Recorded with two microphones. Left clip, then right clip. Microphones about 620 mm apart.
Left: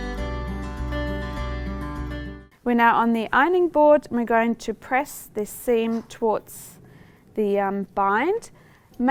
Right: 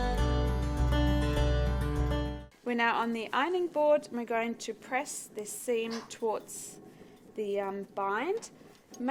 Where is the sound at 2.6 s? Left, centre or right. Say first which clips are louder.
Left 11 dB; left.